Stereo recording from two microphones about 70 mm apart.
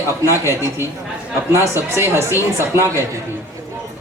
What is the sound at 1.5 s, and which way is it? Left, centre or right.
Speech, right.